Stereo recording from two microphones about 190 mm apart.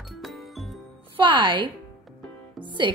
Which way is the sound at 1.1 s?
25° right (ahead or behind).